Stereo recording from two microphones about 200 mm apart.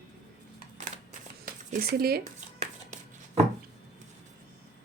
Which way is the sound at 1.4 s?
45° right (ahead or behind).